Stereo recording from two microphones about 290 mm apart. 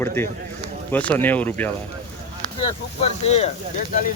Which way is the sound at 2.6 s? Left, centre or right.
Centre.